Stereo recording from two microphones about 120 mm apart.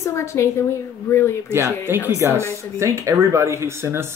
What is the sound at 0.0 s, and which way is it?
A woman's voice, 25° left (ahead or behind).